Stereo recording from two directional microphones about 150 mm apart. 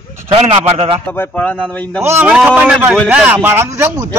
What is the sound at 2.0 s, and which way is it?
Speech, 15° right (ahead or behind).